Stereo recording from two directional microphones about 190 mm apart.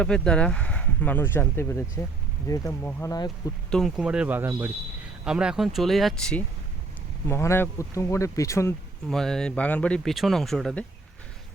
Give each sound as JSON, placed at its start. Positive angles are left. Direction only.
{"t": 0.0, "sound": "speech", "side_deg": 5}
{"t": 3.7, "sound": "speech", "side_deg": 0}
{"t": 9.0, "sound": "speech", "side_deg": 0}